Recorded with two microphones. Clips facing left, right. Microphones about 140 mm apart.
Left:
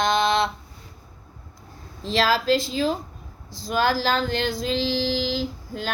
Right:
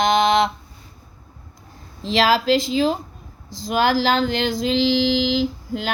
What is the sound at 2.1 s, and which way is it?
Female singing, 90° right.